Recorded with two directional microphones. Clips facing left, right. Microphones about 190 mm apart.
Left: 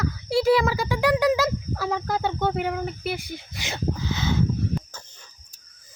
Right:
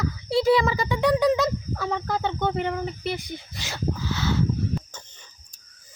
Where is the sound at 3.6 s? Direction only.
20° left (ahead or behind).